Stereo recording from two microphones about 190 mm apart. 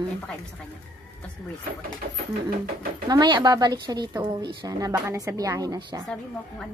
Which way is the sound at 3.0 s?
25° right (ahead or behind).